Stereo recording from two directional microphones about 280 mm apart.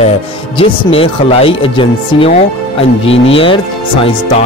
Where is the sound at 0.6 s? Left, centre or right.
Centre.